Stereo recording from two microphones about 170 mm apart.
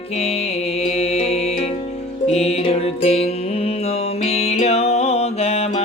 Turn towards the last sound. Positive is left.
turn(degrees=40)  # may be behind; listen again after turning